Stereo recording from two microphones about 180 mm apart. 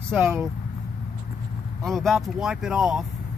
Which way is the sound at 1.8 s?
Centre (ahead or behind).